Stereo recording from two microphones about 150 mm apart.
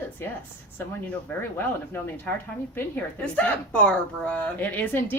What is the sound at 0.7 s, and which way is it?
Speech, 15° left (ahead or behind).